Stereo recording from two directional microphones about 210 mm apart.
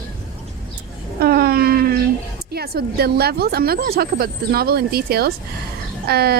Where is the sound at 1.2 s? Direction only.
45° right (ahead or behind).